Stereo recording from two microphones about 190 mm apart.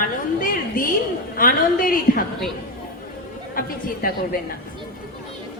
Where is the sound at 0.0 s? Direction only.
50° left (ahead or behind).